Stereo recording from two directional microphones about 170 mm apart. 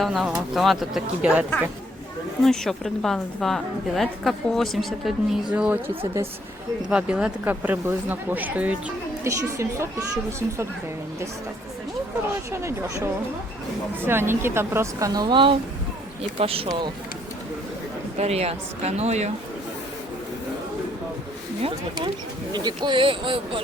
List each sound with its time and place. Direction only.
0.0 s a woman's voice: centre (ahead or behind)
6.9 s speech: 5° right (ahead or behind)
12.5 s speech: 15° right (ahead or behind)
18.2 s speech: 35° right (ahead or behind)
22.5 s speech: 25° right (ahead or behind)